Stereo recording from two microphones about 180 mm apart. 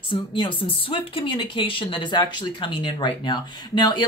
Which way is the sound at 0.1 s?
30° left (ahead or behind).